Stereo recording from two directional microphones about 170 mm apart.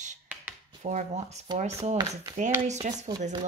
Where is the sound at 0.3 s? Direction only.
10° right (ahead or behind).